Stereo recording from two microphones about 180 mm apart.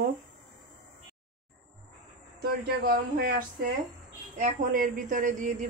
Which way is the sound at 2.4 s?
55° right (ahead or behind).